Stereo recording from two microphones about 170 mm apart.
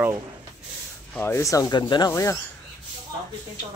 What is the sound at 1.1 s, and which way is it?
A man's voice, 10° left (ahead or behind).